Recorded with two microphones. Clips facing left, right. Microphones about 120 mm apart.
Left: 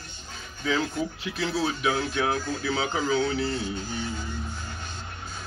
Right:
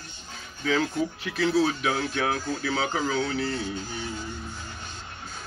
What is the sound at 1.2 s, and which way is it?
Speech, 20° left (ahead or behind).